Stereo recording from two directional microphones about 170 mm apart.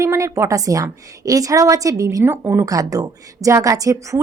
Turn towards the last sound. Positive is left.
turn(degrees=-20)  # may be behind; listen again after turning